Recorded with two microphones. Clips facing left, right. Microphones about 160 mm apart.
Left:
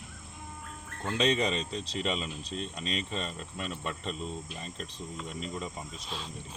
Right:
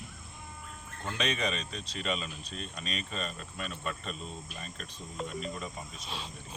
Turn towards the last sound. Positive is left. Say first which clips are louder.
# left 2 dB
turn(degrees=25)  # may be behind; listen again after turning